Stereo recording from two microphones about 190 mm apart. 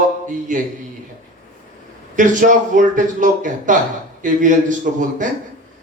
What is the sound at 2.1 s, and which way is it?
Speech, 45° right (ahead or behind).